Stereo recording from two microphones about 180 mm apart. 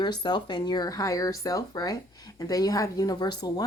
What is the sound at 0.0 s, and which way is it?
Speech, 25° left (ahead or behind).